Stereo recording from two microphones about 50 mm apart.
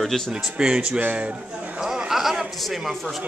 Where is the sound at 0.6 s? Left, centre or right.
Centre.